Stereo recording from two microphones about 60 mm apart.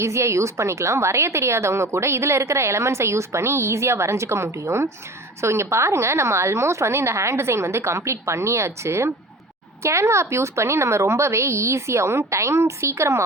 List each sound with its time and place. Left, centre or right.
0.0 s a woman's voice: right